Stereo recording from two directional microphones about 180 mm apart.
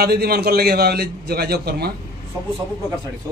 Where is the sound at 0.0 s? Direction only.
60° right (ahead or behind).